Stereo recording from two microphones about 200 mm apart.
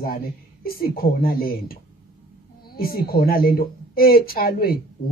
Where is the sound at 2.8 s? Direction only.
50° left (ahead or behind).